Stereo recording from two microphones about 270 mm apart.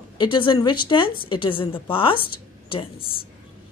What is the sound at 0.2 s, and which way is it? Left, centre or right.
A woman's voice, centre.